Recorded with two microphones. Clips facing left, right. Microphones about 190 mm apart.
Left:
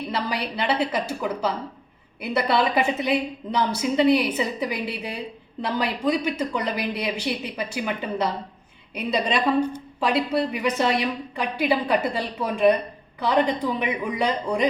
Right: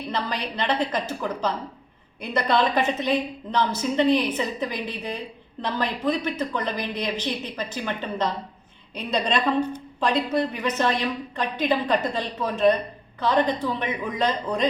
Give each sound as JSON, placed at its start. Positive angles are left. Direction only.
{"t": 0.1, "sound": "a woman's voice", "side_deg": 10}